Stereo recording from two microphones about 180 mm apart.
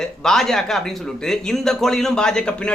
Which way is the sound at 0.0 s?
Centre (ahead or behind).